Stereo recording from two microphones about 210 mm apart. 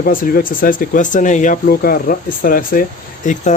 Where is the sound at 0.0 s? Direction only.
45° left (ahead or behind).